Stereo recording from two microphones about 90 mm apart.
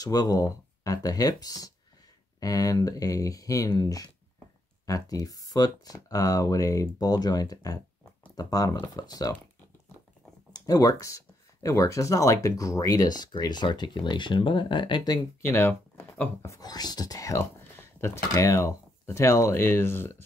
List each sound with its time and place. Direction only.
0.0 s speech: 45° left (ahead or behind)
10.5 s speech: 40° left (ahead or behind)
13.4 s speech: 55° left (ahead or behind)
15.4 s speech: 25° left (ahead or behind)
16.4 s speech: 40° left (ahead or behind)